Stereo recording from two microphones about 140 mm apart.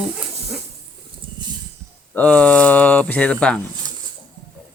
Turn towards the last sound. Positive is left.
turn(degrees=5)  # may be behind; listen again after turning